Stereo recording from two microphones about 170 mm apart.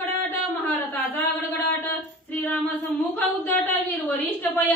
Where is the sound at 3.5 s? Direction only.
10° left (ahead or behind).